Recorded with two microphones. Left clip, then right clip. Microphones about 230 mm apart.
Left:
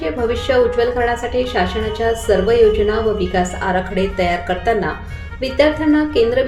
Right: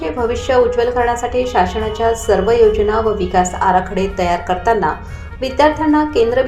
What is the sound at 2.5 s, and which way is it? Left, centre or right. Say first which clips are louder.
Speech: right 1 dB; centre.